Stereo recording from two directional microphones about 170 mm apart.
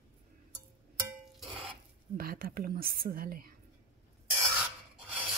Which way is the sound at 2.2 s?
60° right (ahead or behind).